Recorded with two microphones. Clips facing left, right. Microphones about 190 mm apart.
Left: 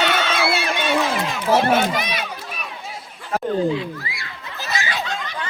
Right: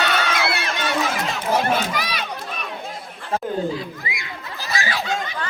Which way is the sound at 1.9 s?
25° left (ahead or behind).